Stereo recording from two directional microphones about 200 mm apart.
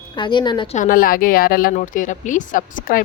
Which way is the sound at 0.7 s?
45° left (ahead or behind).